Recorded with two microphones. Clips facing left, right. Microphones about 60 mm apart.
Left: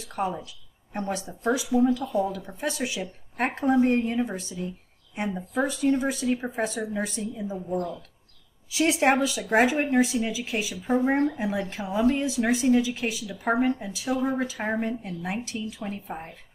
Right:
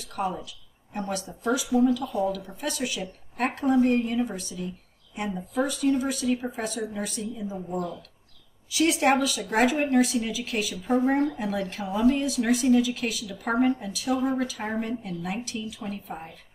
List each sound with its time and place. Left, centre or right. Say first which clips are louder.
0.0 s a woman's voice: left 1 dB; left
7.5 s a woman's voice: left 3 dB; centre
8.6 s a woman's voice: even; left